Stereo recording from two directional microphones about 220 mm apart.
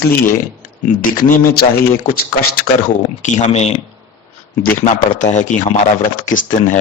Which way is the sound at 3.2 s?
30° left (ahead or behind).